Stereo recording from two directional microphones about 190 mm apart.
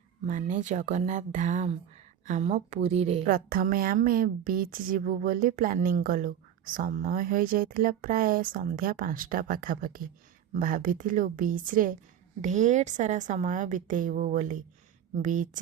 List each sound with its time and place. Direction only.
0.3 s a woman's voice: 45° right (ahead or behind)
3.2 s a woman's voice: 50° right (ahead or behind)